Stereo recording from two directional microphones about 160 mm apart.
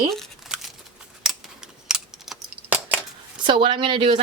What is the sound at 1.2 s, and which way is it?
Scissors, centre (ahead or behind).